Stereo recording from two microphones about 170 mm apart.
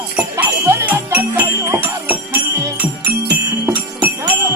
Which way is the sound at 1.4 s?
10° right (ahead or behind).